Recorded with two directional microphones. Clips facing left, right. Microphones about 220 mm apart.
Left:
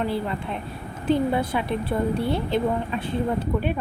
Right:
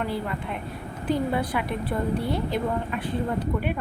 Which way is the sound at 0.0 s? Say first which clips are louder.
Left 3 dB; 30° left (ahead or behind).